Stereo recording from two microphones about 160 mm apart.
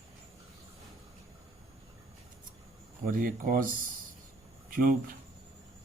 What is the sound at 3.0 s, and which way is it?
Speech, 60° right (ahead or behind).